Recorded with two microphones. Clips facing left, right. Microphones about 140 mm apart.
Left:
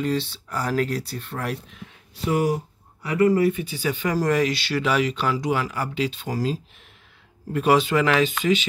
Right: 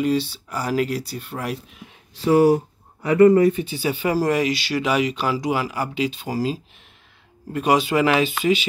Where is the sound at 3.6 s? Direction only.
15° right (ahead or behind).